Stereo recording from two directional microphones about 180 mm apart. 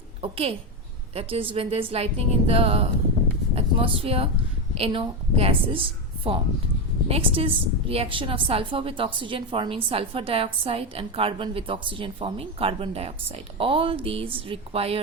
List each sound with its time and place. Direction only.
0.2 s a woman's voice: 30° right (ahead or behind)